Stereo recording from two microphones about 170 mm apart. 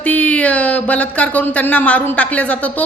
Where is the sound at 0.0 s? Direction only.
10° left (ahead or behind).